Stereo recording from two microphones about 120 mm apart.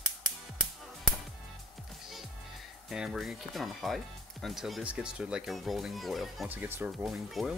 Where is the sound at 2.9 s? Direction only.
5° right (ahead or behind).